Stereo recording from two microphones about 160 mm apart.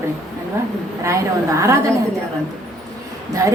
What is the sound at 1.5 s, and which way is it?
Speech, 15° right (ahead or behind).